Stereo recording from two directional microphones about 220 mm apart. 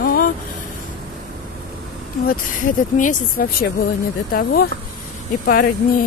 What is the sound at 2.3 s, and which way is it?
Speech, 35° left (ahead or behind).